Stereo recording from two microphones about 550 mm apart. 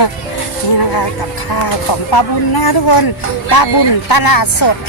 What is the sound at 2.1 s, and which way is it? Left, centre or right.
A woman's voice, left.